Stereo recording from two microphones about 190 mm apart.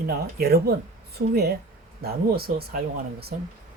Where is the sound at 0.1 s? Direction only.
55° right (ahead or behind).